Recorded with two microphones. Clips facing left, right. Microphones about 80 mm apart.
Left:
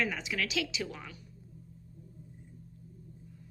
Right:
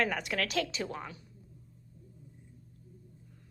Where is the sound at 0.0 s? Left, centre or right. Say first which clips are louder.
Right 2 dB; right.